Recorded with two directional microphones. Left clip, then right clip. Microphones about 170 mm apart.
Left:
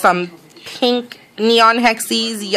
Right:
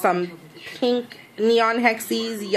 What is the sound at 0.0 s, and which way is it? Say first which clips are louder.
Speech: left 7 dB; 35° left (ahead or behind).